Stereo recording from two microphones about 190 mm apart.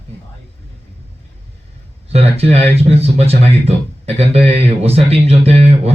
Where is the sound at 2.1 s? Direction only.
30° right (ahead or behind).